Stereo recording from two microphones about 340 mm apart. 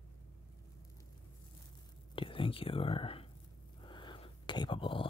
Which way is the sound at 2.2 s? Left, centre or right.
Centre.